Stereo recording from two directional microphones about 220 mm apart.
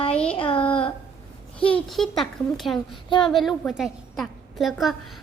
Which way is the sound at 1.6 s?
5° left (ahead or behind).